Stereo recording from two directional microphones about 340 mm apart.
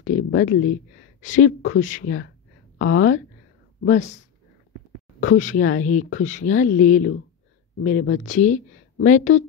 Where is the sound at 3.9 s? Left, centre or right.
Left.